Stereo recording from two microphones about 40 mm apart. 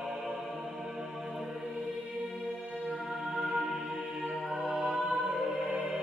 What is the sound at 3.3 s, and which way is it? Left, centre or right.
Music, centre.